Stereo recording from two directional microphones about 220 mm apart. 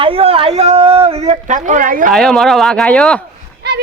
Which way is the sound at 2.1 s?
Centre (ahead or behind).